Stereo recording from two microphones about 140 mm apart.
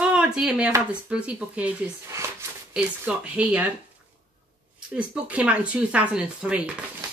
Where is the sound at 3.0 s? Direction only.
10° right (ahead or behind).